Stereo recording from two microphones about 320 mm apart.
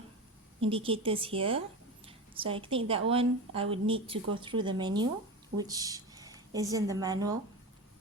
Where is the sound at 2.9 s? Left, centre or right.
Centre.